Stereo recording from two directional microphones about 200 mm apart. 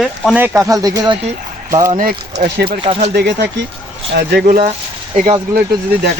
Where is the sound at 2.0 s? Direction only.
50° right (ahead or behind).